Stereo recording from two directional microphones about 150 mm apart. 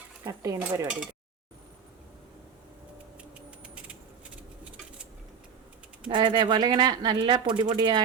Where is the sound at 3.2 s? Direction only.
10° right (ahead or behind).